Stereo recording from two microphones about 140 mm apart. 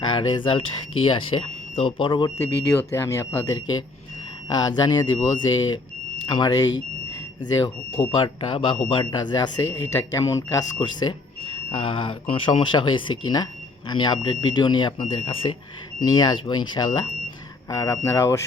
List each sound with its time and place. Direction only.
0.0 s speech: 35° left (ahead or behind)
2.4 s speech: 20° left (ahead or behind); by 15.5 s 40° left (ahead or behind)
16.0 s speech: 30° left (ahead or behind)